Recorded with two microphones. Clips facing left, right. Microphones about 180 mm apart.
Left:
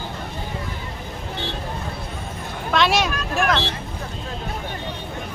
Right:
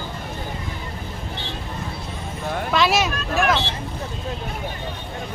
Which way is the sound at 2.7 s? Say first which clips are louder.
Left 1 dB; centre (ahead or behind).